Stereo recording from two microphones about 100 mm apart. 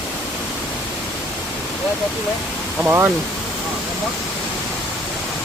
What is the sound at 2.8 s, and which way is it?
Speech, 20° right (ahead or behind).